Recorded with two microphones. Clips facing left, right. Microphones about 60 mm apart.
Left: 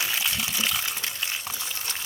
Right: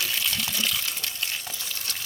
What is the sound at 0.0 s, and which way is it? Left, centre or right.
Water, centre.